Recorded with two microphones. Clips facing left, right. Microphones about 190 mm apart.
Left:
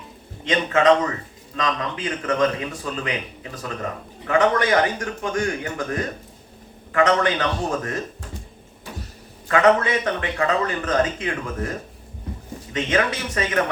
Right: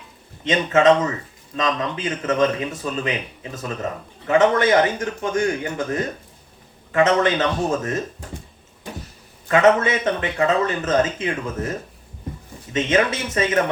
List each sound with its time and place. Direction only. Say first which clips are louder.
0.4 s a man's voice: right 2 dB; 25° right (ahead or behind)
9.5 s a man's voice: right 1 dB; 25° right (ahead or behind)
12.7 s a man's voice: right 3 dB; 25° right (ahead or behind)